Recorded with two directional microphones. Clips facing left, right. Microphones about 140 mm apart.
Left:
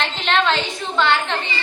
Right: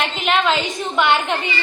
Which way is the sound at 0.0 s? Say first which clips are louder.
Right 1 dB; 10° right (ahead or behind).